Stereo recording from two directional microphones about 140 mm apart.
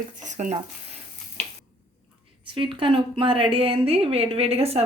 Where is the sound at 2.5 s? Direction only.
35° right (ahead or behind).